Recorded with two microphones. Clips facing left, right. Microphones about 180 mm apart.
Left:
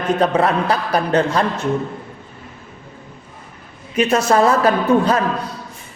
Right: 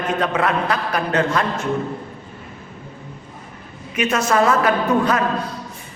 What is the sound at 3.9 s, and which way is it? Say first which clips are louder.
A man's voice: left 3 dB; 35° left (ahead or behind).